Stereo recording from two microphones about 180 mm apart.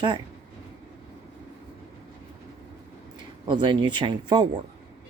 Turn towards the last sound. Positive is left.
turn(degrees=-25)  # may be behind; listen again after turning